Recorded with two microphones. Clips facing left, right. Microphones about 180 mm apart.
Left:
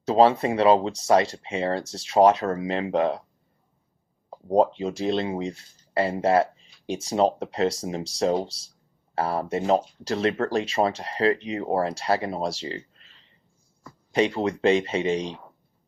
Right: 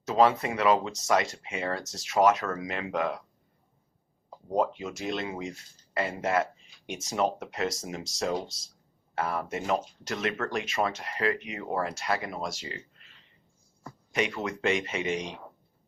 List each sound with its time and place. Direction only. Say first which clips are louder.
0.0 s speech: left 5 dB; 30° left (ahead or behind)
4.3 s speech: left 7 dB; 35° left (ahead or behind)
14.1 s speech: left 7 dB; 30° left (ahead or behind)